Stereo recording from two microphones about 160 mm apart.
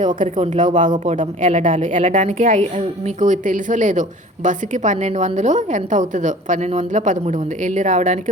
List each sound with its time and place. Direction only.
0.3 s a woman's voice: 50° right (ahead or behind)